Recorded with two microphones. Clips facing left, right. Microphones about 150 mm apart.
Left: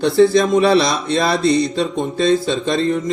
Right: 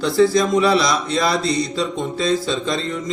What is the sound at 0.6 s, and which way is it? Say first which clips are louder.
Speech: left 3 dB; 60° left (ahead or behind).